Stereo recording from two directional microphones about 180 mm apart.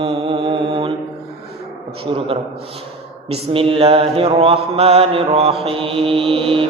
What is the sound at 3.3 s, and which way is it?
Mantra, 30° right (ahead or behind).